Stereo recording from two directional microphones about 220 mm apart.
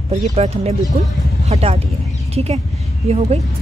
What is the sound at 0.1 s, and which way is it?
Speech, 30° right (ahead or behind).